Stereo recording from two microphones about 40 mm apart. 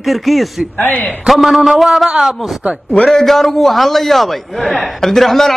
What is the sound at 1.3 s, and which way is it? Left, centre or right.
Speech, centre.